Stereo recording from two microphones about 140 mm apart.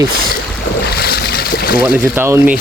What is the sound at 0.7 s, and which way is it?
Boat, 90° left.